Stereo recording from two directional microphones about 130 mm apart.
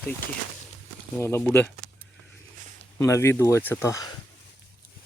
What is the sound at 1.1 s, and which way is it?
Speech, 20° left (ahead or behind).